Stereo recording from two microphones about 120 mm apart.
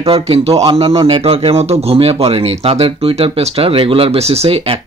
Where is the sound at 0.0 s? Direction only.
55° right (ahead or behind).